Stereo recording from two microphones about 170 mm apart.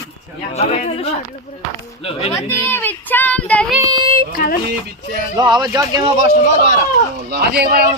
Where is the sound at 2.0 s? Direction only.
35° left (ahead or behind).